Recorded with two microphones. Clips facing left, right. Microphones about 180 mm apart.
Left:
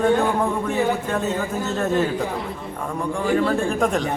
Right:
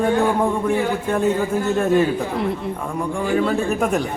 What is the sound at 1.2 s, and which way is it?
Speech, 10° right (ahead or behind).